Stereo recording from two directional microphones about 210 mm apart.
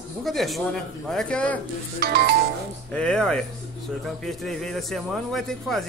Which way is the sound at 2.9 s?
5° left (ahead or behind).